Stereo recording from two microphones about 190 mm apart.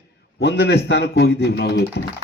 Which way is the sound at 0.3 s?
60° left (ahead or behind).